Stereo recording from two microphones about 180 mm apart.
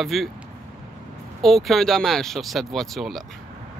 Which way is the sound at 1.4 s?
Centre (ahead or behind).